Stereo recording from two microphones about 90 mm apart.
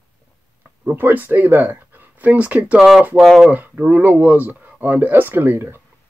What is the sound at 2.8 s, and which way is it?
Speech, centre (ahead or behind).